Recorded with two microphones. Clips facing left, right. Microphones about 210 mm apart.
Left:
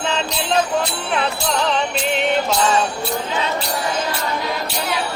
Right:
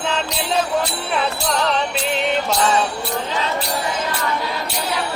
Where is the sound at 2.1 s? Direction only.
Centre (ahead or behind).